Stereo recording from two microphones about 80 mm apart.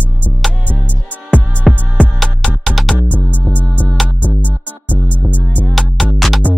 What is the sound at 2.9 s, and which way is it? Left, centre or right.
Music, left.